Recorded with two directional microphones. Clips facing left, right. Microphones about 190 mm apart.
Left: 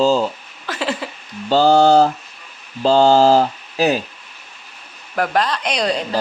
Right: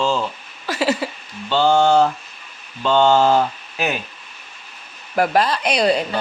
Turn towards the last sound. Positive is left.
turn(degrees=-5)  # may be behind; listen again after turning